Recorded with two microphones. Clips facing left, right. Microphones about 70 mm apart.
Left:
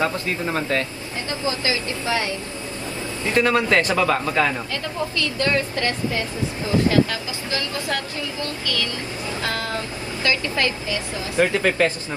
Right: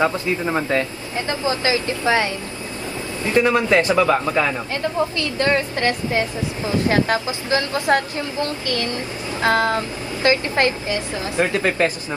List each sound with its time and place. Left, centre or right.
0.0 s a woman's voice: right
3.3 s a woman's voice: centre
5.1 s a woman's voice: right